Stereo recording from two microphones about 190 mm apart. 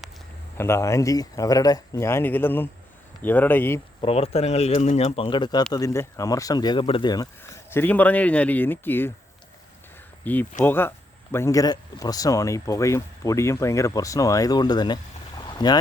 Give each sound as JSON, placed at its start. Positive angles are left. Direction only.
{"t": 0.5, "sound": "speech", "side_deg": 15}
{"t": 4.0, "sound": "speech", "side_deg": 30}
{"t": 10.3, "sound": "speech", "side_deg": 10}
{"t": 15.4, "sound": "boat", "side_deg": 20}